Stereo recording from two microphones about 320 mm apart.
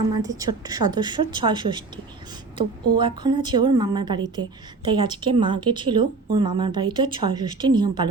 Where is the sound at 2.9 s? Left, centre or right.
Centre.